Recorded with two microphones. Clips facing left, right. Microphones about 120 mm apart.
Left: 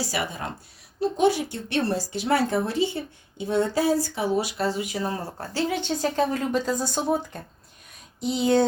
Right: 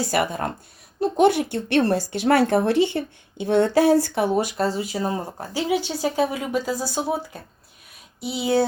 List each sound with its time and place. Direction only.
0.0 s a woman's voice: 55° right (ahead or behind); by 8.6 s 5° right (ahead or behind)